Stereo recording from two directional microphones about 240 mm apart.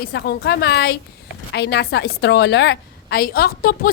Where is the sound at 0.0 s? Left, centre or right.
Left.